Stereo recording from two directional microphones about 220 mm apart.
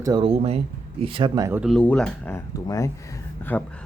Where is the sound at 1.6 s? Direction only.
Centre (ahead or behind).